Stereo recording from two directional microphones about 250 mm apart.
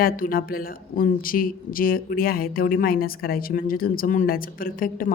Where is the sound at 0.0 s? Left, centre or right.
Left.